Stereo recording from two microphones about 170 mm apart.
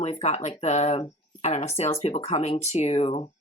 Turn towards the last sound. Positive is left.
turn(degrees=35)  # may be behind; listen again after turning